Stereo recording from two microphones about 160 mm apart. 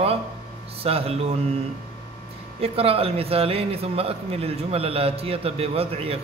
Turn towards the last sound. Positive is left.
turn(degrees=-35)  # may be behind; listen again after turning